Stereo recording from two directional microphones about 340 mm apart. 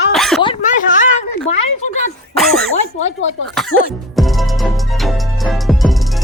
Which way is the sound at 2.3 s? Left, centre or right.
Centre.